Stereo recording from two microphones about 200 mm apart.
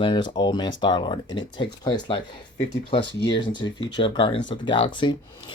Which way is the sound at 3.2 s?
25° left (ahead or behind).